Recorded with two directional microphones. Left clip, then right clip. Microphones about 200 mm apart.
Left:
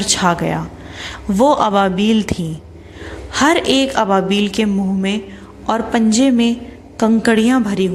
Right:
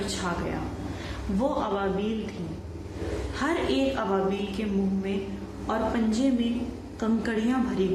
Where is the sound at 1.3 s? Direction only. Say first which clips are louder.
Left 15 dB; 50° left (ahead or behind).